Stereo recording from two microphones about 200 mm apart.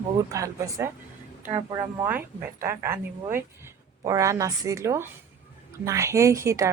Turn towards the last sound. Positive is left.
turn(degrees=-15)  # may be behind; listen again after turning